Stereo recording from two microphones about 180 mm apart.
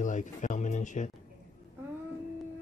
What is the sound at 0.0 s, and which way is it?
Speech, 45° left (ahead or behind).